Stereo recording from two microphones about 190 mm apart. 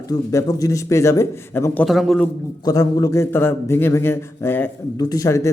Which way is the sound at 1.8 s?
Centre (ahead or behind).